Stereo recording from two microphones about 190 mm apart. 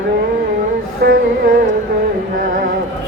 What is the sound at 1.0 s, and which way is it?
Music, 60° right (ahead or behind).